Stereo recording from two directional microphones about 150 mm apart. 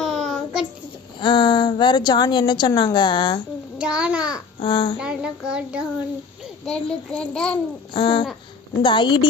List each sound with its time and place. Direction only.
0.0 s child singing: centre (ahead or behind)
1.2 s a woman's voice: 30° left (ahead or behind)
3.8 s child singing: 5° right (ahead or behind)
4.6 s a woman's voice: 35° left (ahead or behind)
4.9 s child singing: 5° right (ahead or behind)
6.7 s a child's voice: 5° left (ahead or behind)
7.9 s a woman's voice: 35° left (ahead or behind)